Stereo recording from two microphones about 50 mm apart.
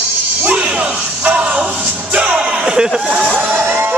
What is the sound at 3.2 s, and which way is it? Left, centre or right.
Speech, right.